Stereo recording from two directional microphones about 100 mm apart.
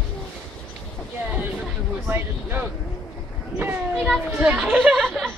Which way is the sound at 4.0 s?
Centre (ahead or behind).